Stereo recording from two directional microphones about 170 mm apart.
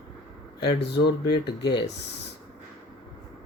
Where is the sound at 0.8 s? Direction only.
75° left (ahead or behind).